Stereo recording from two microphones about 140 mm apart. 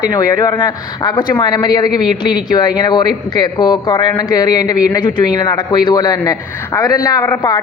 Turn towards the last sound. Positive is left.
turn(degrees=30)  # may be behind; listen again after turning